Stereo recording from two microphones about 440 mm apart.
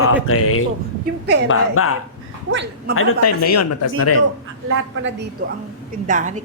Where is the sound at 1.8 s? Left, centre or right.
Left.